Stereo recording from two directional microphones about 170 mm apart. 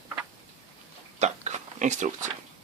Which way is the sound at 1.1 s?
45° right (ahead or behind).